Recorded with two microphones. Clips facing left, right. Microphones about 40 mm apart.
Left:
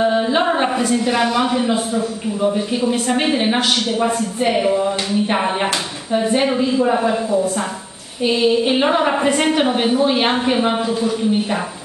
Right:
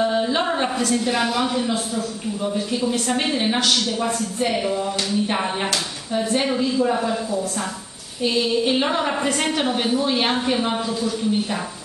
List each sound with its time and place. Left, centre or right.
0.0 s a woman's voice: centre